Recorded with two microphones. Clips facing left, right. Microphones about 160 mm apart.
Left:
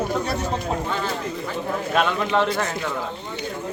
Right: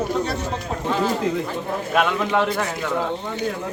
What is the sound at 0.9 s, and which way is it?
Speech, 5° right (ahead or behind).